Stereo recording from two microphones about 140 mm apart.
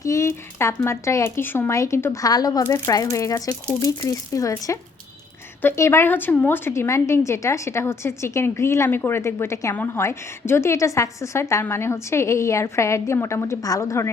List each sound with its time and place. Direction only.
0.0 s a woman's voice: 20° left (ahead or behind)